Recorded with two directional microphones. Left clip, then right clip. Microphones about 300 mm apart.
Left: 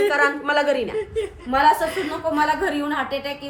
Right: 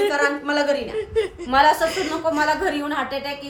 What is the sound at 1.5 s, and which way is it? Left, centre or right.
A woman's voice, centre.